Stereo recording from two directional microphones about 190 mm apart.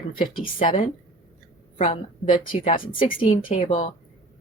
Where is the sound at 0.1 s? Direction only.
50° left (ahead or behind).